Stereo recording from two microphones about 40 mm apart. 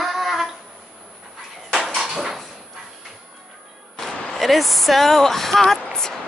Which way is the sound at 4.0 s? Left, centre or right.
Centre.